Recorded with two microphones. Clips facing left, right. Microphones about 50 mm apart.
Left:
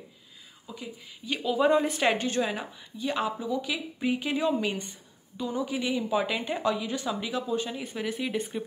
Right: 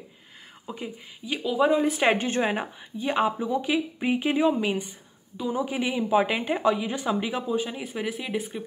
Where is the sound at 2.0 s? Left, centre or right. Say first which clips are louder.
Right 3 dB; right.